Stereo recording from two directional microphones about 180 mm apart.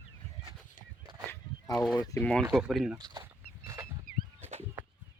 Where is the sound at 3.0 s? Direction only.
20° right (ahead or behind).